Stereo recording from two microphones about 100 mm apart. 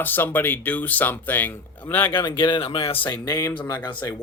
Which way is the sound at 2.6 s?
70° left (ahead or behind).